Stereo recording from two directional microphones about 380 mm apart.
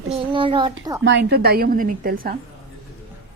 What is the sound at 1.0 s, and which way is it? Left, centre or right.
A woman's voice, right.